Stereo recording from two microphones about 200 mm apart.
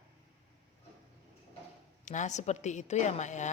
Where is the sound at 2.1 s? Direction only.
35° left (ahead or behind).